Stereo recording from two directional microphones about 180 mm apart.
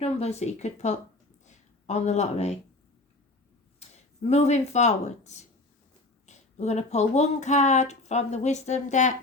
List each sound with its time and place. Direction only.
0.0 s speech: 35° left (ahead or behind)
3.8 s speech: 35° left (ahead or behind)